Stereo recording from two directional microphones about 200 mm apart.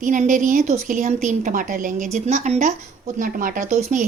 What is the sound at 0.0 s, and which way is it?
Speech, 40° right (ahead or behind).